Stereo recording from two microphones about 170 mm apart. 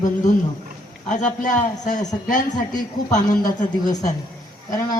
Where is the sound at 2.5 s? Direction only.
25° left (ahead or behind).